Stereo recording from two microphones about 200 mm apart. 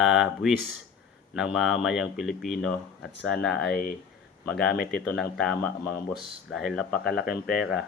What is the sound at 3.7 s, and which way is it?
Speech, 50° left (ahead or behind).